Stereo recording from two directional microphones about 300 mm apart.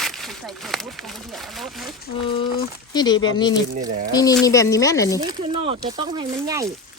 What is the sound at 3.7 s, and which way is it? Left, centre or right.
Speech, right.